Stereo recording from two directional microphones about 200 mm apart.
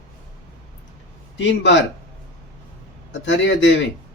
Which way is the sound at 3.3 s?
65° left (ahead or behind).